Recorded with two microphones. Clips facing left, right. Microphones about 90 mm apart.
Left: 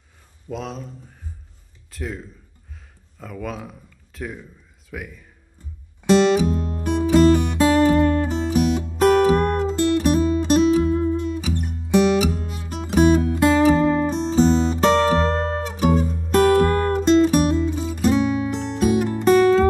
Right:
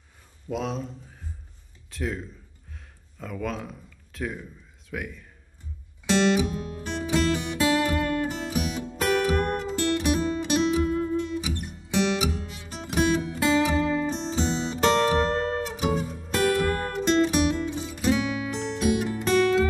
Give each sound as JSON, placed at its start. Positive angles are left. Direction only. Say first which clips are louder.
{"t": 0.5, "sound": "speech", "louder": "right 1 dB", "side_deg": 0}
{"t": 1.9, "sound": "speech", "louder": "even", "side_deg": 0}
{"t": 3.2, "sound": "speech", "louder": "left 1 dB", "side_deg": 0}
{"t": 6.0, "sound": "music", "louder": "left 6 dB", "side_deg": 40}